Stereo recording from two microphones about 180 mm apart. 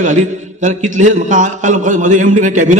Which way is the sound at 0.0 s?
45° right (ahead or behind).